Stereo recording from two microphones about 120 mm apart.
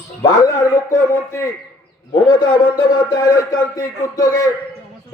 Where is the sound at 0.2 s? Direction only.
30° left (ahead or behind).